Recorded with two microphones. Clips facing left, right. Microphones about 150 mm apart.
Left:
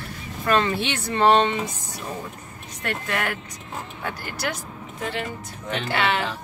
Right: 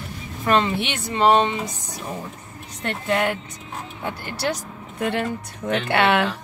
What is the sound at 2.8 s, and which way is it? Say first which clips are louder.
Speech: right 5 dB; 25° right (ahead or behind).